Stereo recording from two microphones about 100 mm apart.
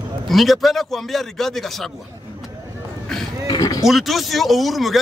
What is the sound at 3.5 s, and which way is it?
Speech, 35° left (ahead or behind).